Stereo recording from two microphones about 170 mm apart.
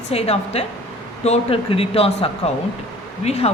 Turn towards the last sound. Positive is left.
turn(degrees=35)  # may be behind; listen again after turning